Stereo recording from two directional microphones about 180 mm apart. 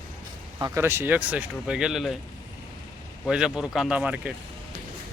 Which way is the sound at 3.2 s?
5° right (ahead or behind).